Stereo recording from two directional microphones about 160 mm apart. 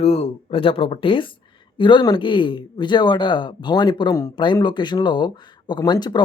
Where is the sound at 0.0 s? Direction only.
40° left (ahead or behind).